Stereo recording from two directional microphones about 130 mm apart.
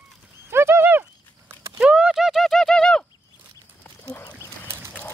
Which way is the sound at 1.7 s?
5° right (ahead or behind).